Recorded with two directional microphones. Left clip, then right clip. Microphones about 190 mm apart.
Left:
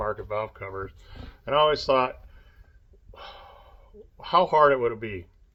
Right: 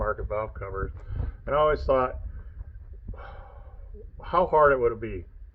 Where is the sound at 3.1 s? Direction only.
20° left (ahead or behind).